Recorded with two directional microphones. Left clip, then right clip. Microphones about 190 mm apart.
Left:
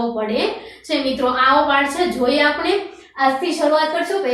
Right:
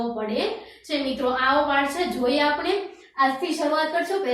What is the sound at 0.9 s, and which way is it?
A woman's voice, centre (ahead or behind).